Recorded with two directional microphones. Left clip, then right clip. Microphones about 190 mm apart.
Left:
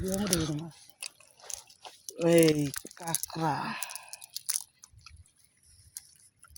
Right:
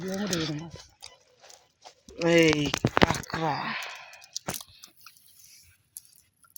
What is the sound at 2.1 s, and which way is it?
Speech, centre (ahead or behind).